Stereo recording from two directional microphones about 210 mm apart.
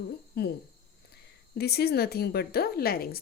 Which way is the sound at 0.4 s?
50° left (ahead or behind).